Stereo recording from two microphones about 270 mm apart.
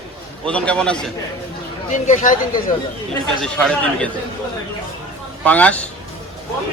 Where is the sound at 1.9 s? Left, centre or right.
Left.